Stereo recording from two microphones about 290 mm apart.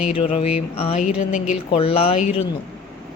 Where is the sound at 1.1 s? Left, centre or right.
Left.